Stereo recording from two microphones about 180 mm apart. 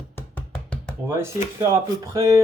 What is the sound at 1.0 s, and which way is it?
Speech, 15° right (ahead or behind).